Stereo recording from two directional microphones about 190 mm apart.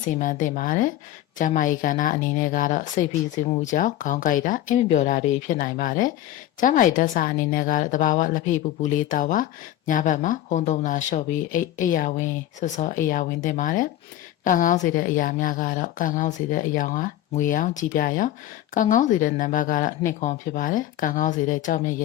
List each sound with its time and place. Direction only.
0.2 s speech: 45° left (ahead or behind)